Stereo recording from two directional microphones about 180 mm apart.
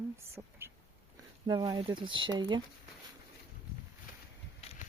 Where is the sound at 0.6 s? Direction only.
15° right (ahead or behind).